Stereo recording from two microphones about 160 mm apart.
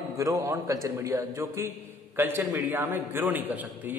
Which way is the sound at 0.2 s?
20° right (ahead or behind).